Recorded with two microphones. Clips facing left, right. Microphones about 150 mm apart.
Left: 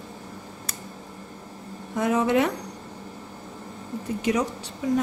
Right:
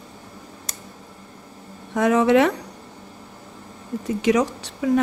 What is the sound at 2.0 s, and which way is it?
Speech, 90° right.